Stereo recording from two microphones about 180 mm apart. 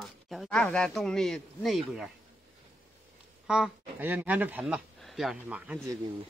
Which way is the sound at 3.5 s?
5° right (ahead or behind).